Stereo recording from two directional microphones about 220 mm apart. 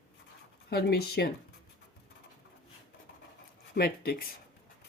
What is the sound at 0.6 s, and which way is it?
Speech, 45° left (ahead or behind).